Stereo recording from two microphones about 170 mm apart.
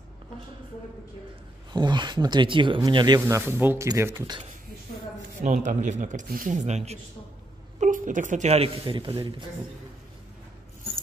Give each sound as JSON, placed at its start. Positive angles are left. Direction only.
{"t": 1.7, "sound": "speech", "side_deg": -25}
{"t": 3.2, "sound": "speech", "side_deg": -15}
{"t": 5.4, "sound": "speech", "side_deg": -45}